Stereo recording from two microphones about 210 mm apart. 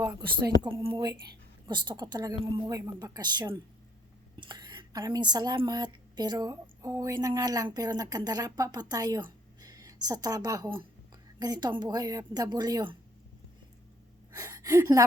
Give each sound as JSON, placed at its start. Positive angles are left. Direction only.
{"t": 0.3, "sound": "a woman's voice", "side_deg": -20}
{"t": 14.3, "sound": "speech", "side_deg": -15}